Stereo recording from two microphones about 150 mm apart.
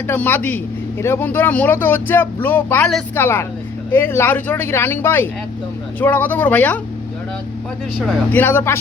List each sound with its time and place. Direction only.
0.1 s speech: 15° left (ahead or behind)
8.3 s speech: 15° left (ahead or behind)